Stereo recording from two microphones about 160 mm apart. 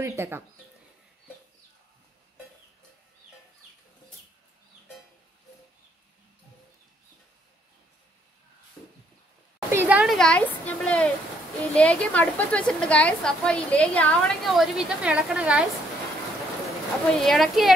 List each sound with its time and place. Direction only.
0.0 s speech: 15° right (ahead or behind)
9.7 s a sound: 10° right (ahead or behind)
10.1 s a woman's voice: 5° left (ahead or behind)
16.6 s a woman's voice: centre (ahead or behind)